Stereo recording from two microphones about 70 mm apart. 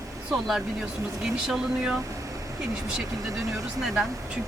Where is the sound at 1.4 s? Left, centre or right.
Centre.